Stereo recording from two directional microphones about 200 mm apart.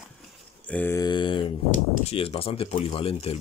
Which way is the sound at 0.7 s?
10° left (ahead or behind).